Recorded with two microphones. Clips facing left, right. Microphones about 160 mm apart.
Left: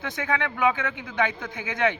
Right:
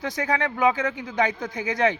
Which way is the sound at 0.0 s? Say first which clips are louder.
Right 2 dB; 40° right (ahead or behind).